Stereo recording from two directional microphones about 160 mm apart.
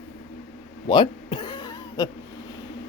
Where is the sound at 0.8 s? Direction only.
30° left (ahead or behind).